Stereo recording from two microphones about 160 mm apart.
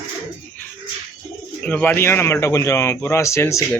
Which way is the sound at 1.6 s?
10° left (ahead or behind).